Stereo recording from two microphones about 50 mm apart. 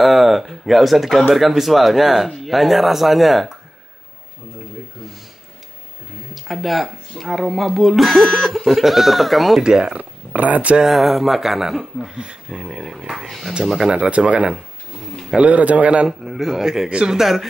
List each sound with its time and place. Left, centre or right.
0.0 s speech: centre
6.3 s speech: centre
9.6 s speech: centre
9.9 s speech: right
10.8 s speech: centre
13.8 s speech: centre
16.1 s speech: centre